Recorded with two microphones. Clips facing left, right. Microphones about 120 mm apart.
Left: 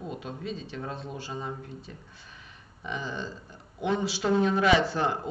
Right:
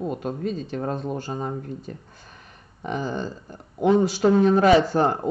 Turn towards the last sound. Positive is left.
turn(degrees=-45)  # may be behind; listen again after turning